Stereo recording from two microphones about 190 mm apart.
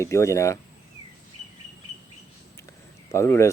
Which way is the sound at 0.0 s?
15° left (ahead or behind).